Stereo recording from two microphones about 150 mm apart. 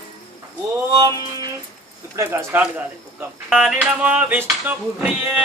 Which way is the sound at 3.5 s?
5° right (ahead or behind).